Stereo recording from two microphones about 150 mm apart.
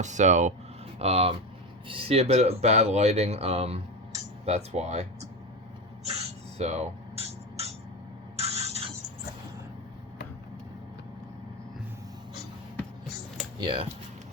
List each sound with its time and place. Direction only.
0.0 s speech: 55° right (ahead or behind)
6.6 s a sound: 45° right (ahead or behind)
13.6 s speech: 35° right (ahead or behind)